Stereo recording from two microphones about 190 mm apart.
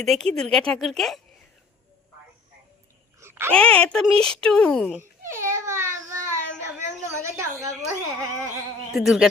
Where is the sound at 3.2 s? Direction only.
15° right (ahead or behind).